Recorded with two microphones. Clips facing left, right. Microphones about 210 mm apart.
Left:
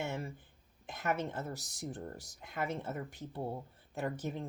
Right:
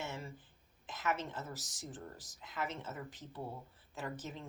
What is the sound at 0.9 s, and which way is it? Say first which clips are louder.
A woman's voice: left 3 dB; 60° left (ahead or behind).